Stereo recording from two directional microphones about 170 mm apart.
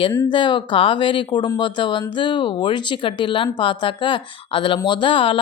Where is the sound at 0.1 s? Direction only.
20° left (ahead or behind).